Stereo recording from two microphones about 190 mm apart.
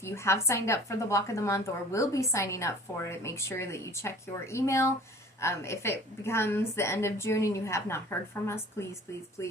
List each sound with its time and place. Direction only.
0.0 s a woman's voice: 15° left (ahead or behind)
9.4 s a woman's voice: 15° left (ahead or behind)